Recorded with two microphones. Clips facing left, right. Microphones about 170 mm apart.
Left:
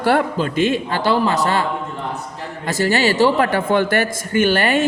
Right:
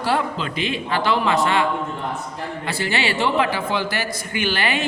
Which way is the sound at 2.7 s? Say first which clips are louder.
Left 7 dB; 45° left (ahead or behind).